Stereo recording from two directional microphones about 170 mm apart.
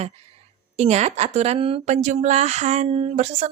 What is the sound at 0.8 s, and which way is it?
A woman's voice, 40° right (ahead or behind).